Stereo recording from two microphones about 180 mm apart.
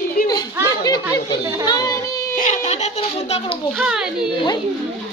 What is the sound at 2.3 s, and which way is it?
A child's voice, 45° left (ahead or behind).